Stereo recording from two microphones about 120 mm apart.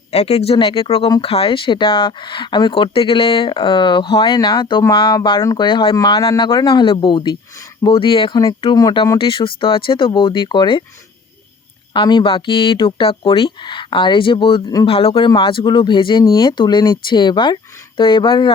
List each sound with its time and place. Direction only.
0.1 s speech: 60° left (ahead or behind); by 6.0 s 45° left (ahead or behind)
6.0 s speech: 30° left (ahead or behind)
11.9 s speech: 40° left (ahead or behind)
15.3 s speech: 40° left (ahead or behind)